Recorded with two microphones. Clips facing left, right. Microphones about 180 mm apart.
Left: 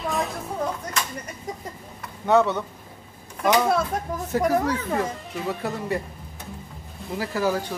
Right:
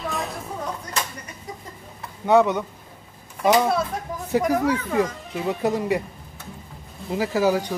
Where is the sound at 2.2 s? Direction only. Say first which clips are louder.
Right 2 dB; 15° right (ahead or behind).